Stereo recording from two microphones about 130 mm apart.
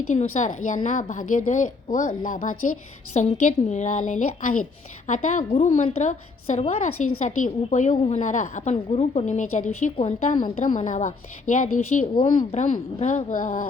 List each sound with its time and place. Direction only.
0.1 s a woman's voice: 65° left (ahead or behind); by 2.7 s 90° left
3.2 s a woman's voice: 65° left (ahead or behind); by 13.6 s 85° left